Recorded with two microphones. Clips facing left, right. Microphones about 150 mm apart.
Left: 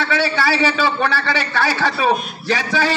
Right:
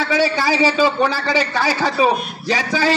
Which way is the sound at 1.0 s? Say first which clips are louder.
Right 2 dB; 15° right (ahead or behind).